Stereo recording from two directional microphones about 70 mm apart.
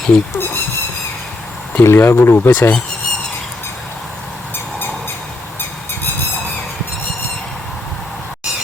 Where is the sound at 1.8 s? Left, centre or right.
Left.